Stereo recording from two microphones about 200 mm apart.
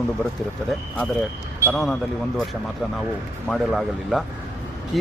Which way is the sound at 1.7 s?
Centre (ahead or behind).